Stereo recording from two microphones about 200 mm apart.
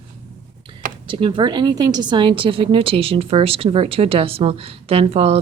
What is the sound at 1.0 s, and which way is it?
A woman's voice, 25° right (ahead or behind).